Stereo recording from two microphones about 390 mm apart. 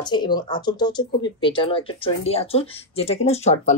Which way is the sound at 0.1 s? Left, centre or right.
Centre.